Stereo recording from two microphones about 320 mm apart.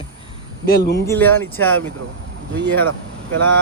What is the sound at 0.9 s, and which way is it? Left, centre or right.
Speech, centre.